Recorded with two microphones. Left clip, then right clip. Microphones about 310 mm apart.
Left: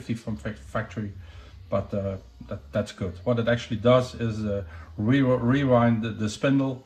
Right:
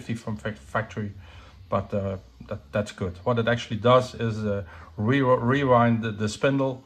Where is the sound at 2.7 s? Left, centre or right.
Right.